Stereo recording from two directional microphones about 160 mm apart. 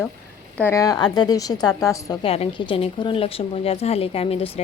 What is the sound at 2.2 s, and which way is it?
Speech, 35° left (ahead or behind).